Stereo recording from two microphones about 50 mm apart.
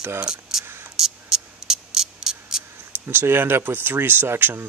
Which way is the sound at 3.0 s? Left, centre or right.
Right.